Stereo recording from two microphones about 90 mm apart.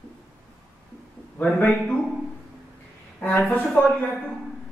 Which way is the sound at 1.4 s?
15° left (ahead or behind).